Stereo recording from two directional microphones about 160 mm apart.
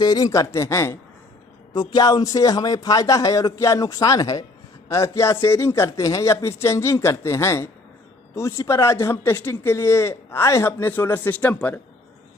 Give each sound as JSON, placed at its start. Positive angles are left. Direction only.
{"t": 0.0, "sound": "speech", "side_deg": 25}